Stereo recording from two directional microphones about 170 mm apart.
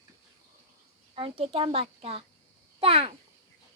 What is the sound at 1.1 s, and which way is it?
A child's voice, 30° right (ahead or behind).